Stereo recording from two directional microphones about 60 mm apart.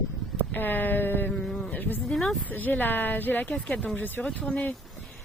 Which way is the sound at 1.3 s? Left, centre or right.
Centre.